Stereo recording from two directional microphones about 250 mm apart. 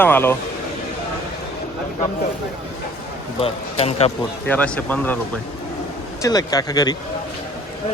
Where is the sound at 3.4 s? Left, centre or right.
Left.